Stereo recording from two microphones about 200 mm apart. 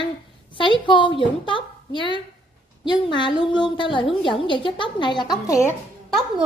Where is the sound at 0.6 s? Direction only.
25° left (ahead or behind).